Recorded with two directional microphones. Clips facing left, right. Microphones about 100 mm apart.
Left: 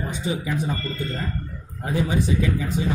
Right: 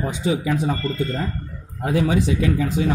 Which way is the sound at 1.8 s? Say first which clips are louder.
Right 4 dB; 90° right.